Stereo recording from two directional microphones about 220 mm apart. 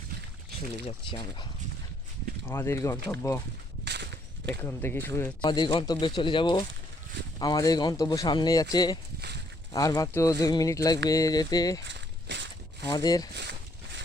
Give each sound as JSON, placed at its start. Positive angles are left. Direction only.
{"t": 0.9, "sound": "speech", "side_deg": 20}
{"t": 2.5, "sound": "speech", "side_deg": 15}
{"t": 3.8, "sound": "a sound", "side_deg": -50}
{"t": 4.6, "sound": "speech", "side_deg": 10}
{"t": 5.4, "sound": "speech", "side_deg": 20}
{"t": 11.9, "sound": "walk", "side_deg": -55}
{"t": 12.9, "sound": "speech", "side_deg": 15}
{"t": 13.3, "sound": "a sound", "side_deg": -50}